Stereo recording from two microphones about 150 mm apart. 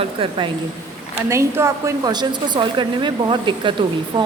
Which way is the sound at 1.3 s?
20° right (ahead or behind).